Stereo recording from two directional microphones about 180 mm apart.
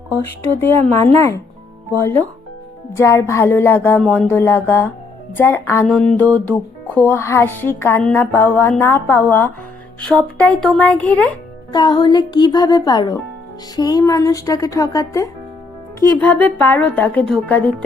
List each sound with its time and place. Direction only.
0.9 s speech: 15° left (ahead or behind)
11.7 s speech: 25° left (ahead or behind)